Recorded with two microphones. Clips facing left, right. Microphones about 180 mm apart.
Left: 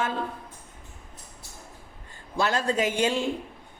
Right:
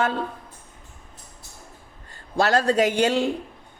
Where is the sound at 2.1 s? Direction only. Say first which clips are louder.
Right 6 dB; 75° right (ahead or behind).